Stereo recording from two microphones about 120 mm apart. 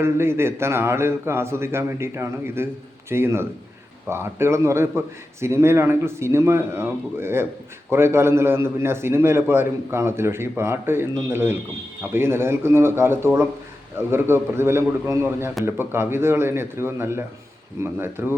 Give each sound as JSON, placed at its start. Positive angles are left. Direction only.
{"t": 0.0, "sound": "a man's voice", "side_deg": -20}